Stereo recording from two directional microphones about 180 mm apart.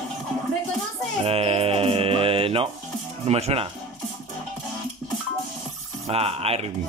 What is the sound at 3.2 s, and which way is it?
Speech, 35° right (ahead or behind).